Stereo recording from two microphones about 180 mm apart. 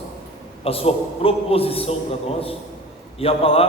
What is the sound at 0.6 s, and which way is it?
A man's voice, 30° left (ahead or behind).